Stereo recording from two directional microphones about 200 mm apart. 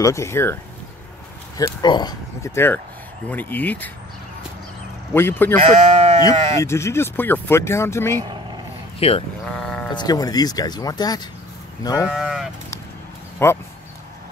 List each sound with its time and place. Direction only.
0.0 s speech: 15° left (ahead or behind)
1.6 s speech: 20° left (ahead or behind)
5.1 s speech: 10° left (ahead or behind)
5.6 s speech: 35° right (ahead or behind)
6.6 s speech: 15° left (ahead or behind)
8.2 s vehicle: 20° right (ahead or behind)
9.0 s speech: 30° left (ahead or behind)
9.5 s sheep: 5° left (ahead or behind)
9.8 s speech: 20° left (ahead or behind)
12.1 s honk: 5° right (ahead or behind)
13.4 s speech: 10° left (ahead or behind)